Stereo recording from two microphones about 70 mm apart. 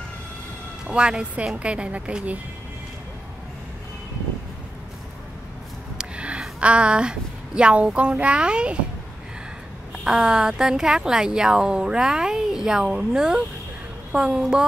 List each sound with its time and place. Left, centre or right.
0.8 s a woman's voice: centre
5.9 s a sound: centre
6.6 s a woman's voice: centre
9.9 s a woman's voice: centre